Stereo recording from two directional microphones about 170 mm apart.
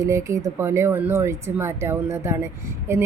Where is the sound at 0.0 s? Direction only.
15° right (ahead or behind).